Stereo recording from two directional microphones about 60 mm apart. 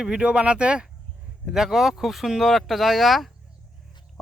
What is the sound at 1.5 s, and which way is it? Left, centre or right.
Speech, centre.